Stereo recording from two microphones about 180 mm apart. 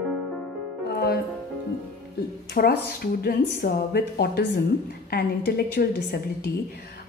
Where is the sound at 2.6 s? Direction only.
55° left (ahead or behind).